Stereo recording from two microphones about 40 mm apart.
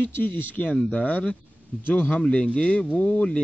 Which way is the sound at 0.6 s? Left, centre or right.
Left.